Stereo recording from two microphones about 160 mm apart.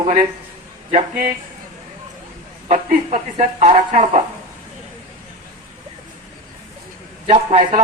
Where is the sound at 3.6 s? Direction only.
35° right (ahead or behind).